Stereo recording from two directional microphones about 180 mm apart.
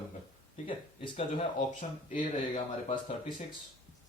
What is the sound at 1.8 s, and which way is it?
Speech, 40° left (ahead or behind).